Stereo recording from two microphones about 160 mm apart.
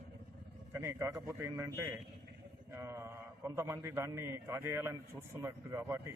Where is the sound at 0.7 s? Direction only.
15° right (ahead or behind).